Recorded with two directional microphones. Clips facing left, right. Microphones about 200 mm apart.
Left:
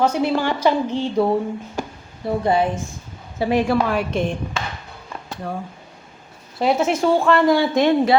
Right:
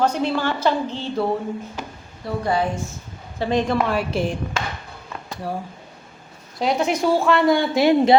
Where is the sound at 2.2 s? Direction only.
25° left (ahead or behind).